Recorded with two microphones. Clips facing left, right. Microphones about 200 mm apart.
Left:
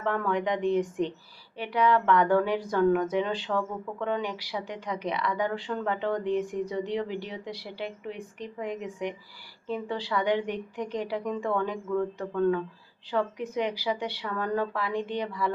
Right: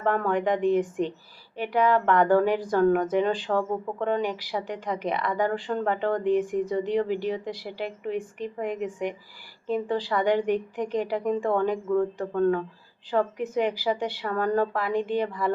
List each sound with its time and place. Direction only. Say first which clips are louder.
0.0 s speech: right 3 dB; 50° right (ahead or behind)